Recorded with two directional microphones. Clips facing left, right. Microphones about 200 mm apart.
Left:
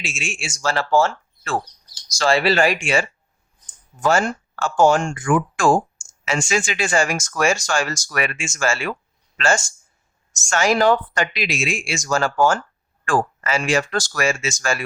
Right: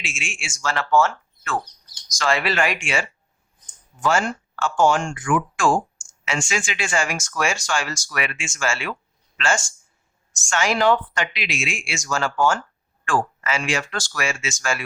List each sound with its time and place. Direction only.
0.0 s speech: 40° left (ahead or behind)
10.5 s speech: 40° left (ahead or behind)